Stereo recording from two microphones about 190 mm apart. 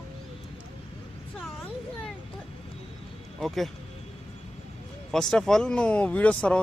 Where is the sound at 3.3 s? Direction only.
Centre (ahead or behind).